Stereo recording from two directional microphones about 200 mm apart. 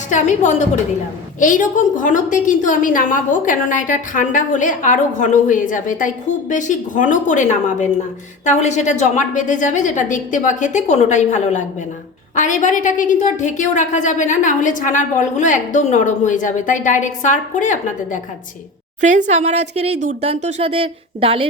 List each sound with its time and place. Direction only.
0.1 s a woman's voice: 35° left (ahead or behind)
19.0 s speech: 35° right (ahead or behind)